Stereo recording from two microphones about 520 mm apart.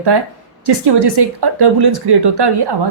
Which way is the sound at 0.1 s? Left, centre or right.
Right.